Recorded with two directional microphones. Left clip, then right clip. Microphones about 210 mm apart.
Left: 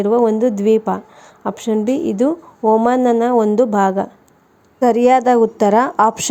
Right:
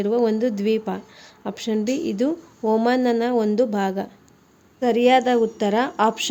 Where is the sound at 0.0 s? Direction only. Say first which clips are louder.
Left 6 dB; 5° left (ahead or behind).